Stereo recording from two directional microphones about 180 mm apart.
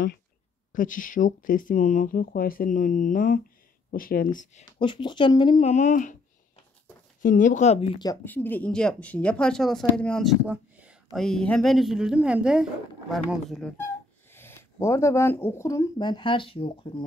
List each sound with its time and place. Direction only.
0.7 s speech: 45° left (ahead or behind)
4.6 s speech: 25° left (ahead or behind)
5.6 s speech: 40° left (ahead or behind)
7.2 s speech: 45° left (ahead or behind); by 8.1 s 30° left (ahead or behind)
8.1 s speech: 10° left (ahead or behind); by 11.0 s 5° right (ahead or behind)
11.1 s speech: 5° left (ahead or behind); by 17.0 s 30° left (ahead or behind)